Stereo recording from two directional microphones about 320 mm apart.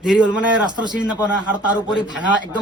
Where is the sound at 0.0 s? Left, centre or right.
Centre.